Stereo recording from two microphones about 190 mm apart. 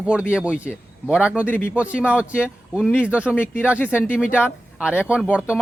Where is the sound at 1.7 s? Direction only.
5° right (ahead or behind).